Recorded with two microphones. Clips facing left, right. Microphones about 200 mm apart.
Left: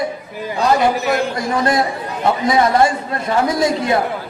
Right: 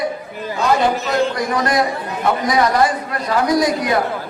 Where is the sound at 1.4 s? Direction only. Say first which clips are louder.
Left 1 dB; 25° left (ahead or behind).